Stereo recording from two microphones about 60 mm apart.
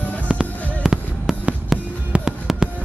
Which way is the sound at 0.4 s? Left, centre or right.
Centre.